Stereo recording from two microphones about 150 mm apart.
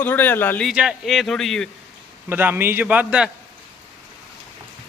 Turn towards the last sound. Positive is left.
turn(degrees=-10)  # may be behind; listen again after turning